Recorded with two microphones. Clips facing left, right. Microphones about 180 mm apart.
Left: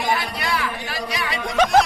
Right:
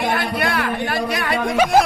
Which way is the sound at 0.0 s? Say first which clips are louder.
Right 4 dB; 55° right (ahead or behind).